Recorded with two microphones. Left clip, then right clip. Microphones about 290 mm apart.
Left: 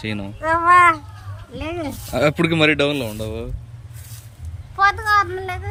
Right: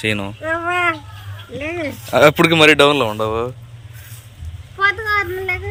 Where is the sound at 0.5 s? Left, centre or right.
Centre.